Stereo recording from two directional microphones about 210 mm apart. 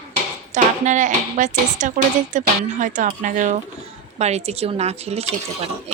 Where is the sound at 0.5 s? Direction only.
35° right (ahead or behind).